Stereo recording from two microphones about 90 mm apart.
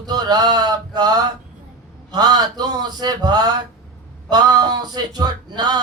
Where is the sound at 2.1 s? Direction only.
50° right (ahead or behind).